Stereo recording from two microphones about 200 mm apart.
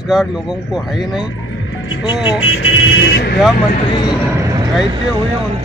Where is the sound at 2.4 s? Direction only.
75° left (ahead or behind); by 3.3 s 55° left (ahead or behind).